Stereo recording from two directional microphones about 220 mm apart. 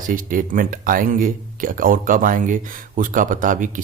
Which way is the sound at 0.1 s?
40° right (ahead or behind).